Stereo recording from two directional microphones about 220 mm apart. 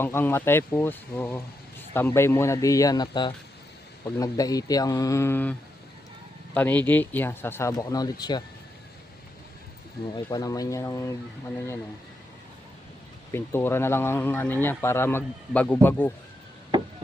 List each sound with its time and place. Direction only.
0.0 s speech: 10° left (ahead or behind)
10.2 s speech: 15° left (ahead or behind)
13.3 s speech: 10° left (ahead or behind)